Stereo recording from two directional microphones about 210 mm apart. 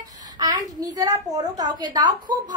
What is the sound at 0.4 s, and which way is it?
A woman's voice, 20° right (ahead or behind).